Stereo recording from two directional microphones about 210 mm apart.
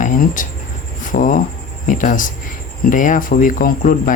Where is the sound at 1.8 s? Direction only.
40° left (ahead or behind).